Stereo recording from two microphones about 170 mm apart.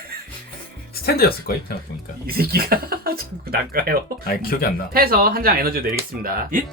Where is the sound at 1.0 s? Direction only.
65° left (ahead or behind).